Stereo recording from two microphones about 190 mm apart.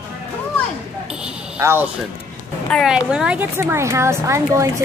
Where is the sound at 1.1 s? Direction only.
5° right (ahead or behind).